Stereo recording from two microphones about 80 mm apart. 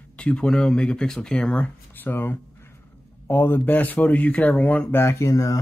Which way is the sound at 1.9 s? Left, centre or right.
Left.